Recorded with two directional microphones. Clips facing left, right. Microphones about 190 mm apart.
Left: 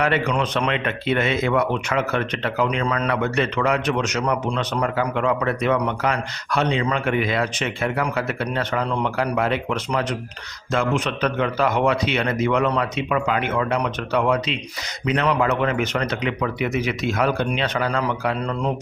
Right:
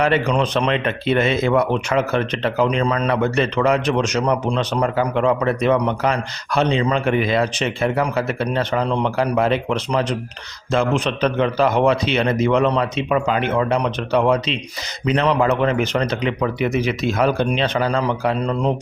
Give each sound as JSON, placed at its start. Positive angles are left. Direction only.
{"t": 0.0, "sound": "a man's voice", "side_deg": -30}